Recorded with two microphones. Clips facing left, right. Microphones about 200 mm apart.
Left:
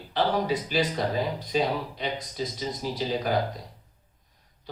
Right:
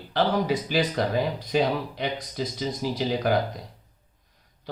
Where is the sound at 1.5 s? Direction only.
70° right (ahead or behind).